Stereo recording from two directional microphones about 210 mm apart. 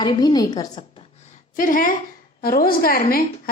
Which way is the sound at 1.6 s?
40° left (ahead or behind).